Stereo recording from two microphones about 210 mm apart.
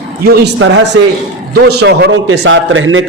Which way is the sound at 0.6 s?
60° right (ahead or behind).